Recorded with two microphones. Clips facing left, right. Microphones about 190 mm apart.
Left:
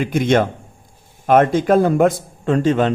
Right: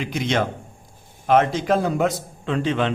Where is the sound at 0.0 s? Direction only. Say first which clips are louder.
Left 7 dB; 50° left (ahead or behind).